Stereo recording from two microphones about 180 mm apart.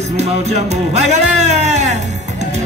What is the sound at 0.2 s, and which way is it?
Music, 40° right (ahead or behind).